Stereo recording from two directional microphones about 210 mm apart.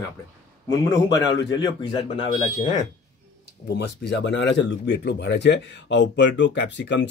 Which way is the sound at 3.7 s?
55° left (ahead or behind).